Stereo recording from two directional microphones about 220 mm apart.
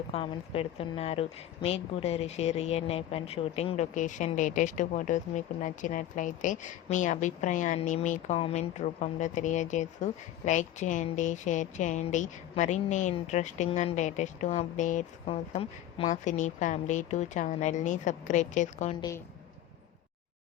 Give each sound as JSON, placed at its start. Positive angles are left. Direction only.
{"t": 0.1, "sound": "a woman's voice", "side_deg": 25}